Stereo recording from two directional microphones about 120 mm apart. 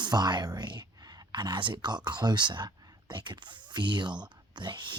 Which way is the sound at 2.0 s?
40° right (ahead or behind).